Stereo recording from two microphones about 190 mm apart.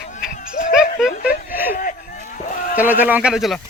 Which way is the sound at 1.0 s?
5° right (ahead or behind).